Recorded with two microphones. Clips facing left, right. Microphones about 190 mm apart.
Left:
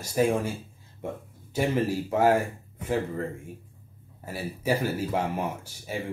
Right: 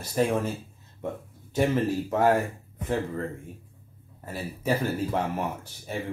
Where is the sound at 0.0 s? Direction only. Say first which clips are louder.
Left 1 dB; 10° left (ahead or behind).